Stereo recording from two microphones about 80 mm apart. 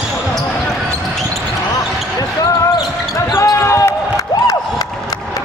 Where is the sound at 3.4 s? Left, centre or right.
Left.